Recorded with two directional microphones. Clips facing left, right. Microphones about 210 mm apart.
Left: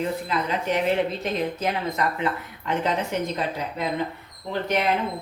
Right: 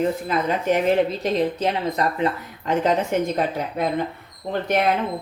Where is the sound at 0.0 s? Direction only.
45° right (ahead or behind).